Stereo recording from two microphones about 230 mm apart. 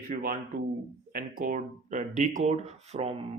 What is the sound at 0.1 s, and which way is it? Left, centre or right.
Speech, right.